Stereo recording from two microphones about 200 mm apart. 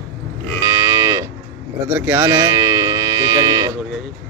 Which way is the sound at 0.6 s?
15° right (ahead or behind).